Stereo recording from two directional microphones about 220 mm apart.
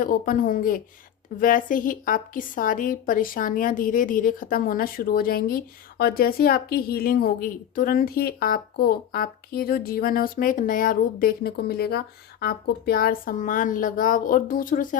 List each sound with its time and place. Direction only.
0.0 s a woman's voice: 40° left (ahead or behind)